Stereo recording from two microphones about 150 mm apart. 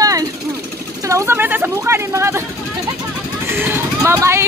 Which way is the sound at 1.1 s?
20° right (ahead or behind).